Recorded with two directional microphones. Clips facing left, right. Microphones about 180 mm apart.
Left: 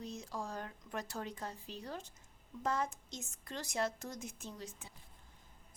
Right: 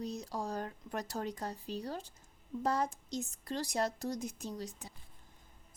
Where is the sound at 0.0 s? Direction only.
35° right (ahead or behind).